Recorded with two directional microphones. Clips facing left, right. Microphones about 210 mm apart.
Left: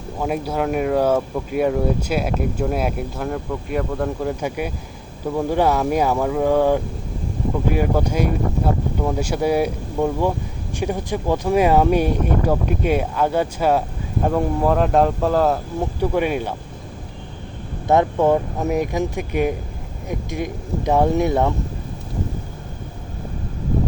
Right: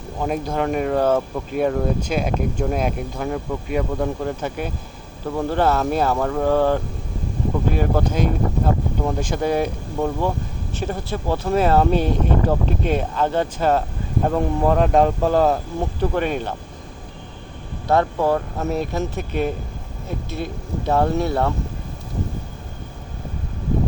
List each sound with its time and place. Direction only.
0.2 s speech: 5° left (ahead or behind)
16.0 s speech: 10° left (ahead or behind)
17.8 s speech: 20° left (ahead or behind)